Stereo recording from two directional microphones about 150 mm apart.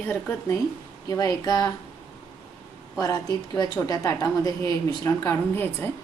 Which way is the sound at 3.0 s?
25° left (ahead or behind).